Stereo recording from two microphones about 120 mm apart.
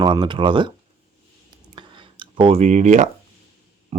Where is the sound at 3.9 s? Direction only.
75° right (ahead or behind).